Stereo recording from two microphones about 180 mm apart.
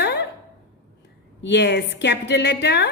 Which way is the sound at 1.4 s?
75° left (ahead or behind).